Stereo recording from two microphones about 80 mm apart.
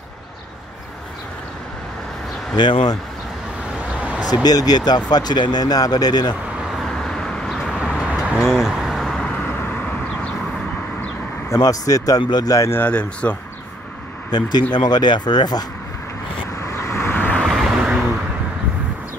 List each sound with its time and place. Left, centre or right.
2.5 s speech: left
4.2 s speech: left
6.8 s vehicle: centre
7.8 s vehicle: centre
8.5 s vehicle: centre
9.2 s vehicle: centre
11.4 s speech: left
12.2 s speech: left
12.4 s speech: left
12.7 s speech: centre
14.3 s speech: left
16.5 s vehicle: left
17.1 s vehicle: left
17.5 s vehicle: centre